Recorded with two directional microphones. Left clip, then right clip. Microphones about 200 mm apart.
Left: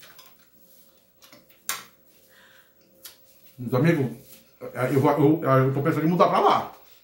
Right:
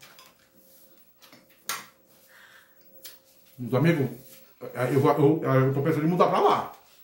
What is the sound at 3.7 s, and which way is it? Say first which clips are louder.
A man's voice: left 2 dB; 10° left (ahead or behind).